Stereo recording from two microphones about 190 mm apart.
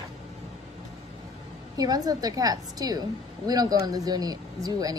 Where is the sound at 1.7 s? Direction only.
20° right (ahead or behind).